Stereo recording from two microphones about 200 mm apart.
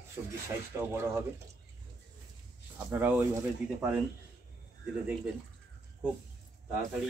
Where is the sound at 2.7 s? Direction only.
10° right (ahead or behind).